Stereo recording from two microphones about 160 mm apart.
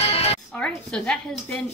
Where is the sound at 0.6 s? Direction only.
5° left (ahead or behind).